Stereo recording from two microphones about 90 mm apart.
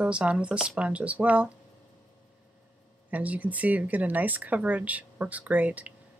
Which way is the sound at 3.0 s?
15° right (ahead or behind).